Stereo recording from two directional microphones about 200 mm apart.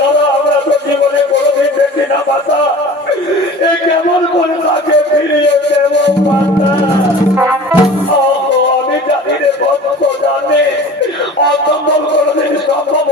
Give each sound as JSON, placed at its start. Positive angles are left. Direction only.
{"t": 5.9, "sound": "music", "side_deg": 60}
{"t": 7.3, "sound": "music", "side_deg": -10}